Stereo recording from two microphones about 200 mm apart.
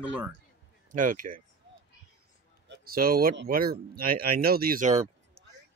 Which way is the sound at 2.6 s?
50° right (ahead or behind).